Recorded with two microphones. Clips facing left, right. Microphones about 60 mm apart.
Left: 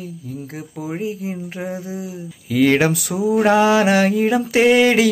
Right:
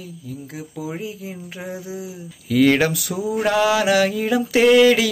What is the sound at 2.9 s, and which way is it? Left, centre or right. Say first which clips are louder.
Speech: left 5 dB; left.